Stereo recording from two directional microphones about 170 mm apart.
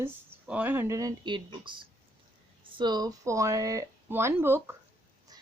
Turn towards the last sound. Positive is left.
turn(degrees=-15)  # may be behind; listen again after turning